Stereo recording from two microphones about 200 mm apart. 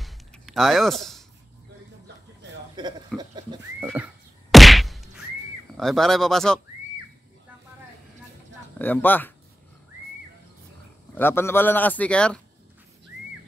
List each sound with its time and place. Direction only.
0.0 s a sound: centre (ahead or behind)
2.8 s speech: 20° right (ahead or behind)
3.8 s whack: 5° right (ahead or behind)
5.8 s speech: centre (ahead or behind)
8.7 s a man's voice: 10° left (ahead or behind)
11.1 s a man's voice: 10° left (ahead or behind)